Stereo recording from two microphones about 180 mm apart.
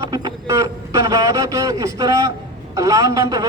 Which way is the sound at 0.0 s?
15° right (ahead or behind).